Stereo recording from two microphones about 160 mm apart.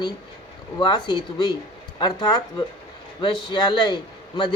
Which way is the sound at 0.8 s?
25° left (ahead or behind).